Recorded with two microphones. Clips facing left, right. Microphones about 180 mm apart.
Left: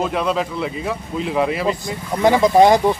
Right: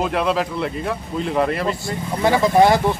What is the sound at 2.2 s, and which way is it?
Speech, 15° left (ahead or behind).